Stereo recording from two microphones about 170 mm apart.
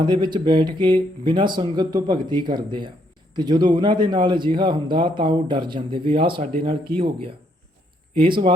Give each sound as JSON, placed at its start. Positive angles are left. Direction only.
{"t": 0.0, "sound": "speech", "side_deg": -25}